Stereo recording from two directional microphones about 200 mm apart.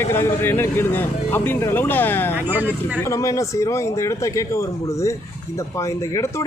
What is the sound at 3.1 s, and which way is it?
A man's voice, 15° left (ahead or behind).